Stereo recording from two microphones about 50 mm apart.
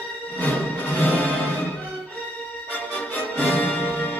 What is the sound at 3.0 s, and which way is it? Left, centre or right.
Music, left.